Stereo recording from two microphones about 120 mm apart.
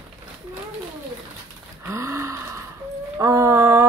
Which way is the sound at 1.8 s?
25° right (ahead or behind).